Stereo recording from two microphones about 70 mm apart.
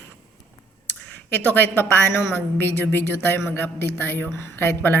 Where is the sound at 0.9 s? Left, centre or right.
Left.